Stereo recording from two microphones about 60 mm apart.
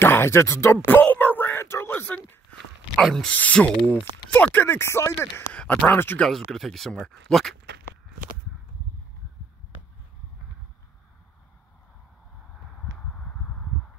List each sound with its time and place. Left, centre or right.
0.0 s speech: left
0.8 s a sound: left
1.6 s speech: left
3.3 s speech: left
4.7 s speech: left
5.5 s a sound: left
5.9 s speech: left
6.2 s speech: centre
13.0 s a sound: centre